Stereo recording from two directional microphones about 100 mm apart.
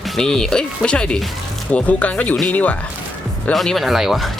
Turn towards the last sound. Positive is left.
turn(degrees=0)  # may be behind; listen again after turning